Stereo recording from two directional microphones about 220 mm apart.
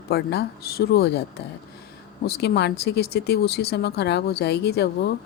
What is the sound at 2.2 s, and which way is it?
Speech, 45° left (ahead or behind).